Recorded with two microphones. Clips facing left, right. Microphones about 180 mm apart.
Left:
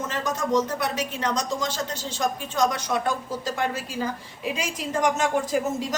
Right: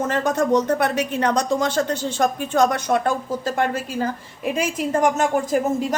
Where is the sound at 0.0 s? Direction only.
60° right (ahead or behind).